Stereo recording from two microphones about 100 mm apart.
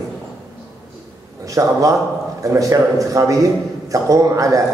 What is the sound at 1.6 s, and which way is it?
A man's voice, 30° right (ahead or behind).